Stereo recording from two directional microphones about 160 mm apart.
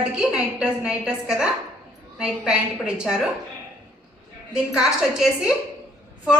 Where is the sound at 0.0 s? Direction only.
5° right (ahead or behind).